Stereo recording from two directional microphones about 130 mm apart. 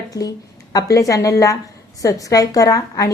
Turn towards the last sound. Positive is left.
turn(degrees=25)  # may be behind; listen again after turning